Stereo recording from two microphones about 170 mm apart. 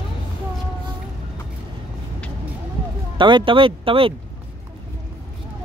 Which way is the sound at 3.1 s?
30° right (ahead or behind).